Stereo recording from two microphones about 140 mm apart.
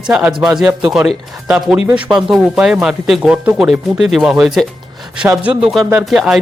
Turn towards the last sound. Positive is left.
turn(degrees=-5)  # may be behind; listen again after turning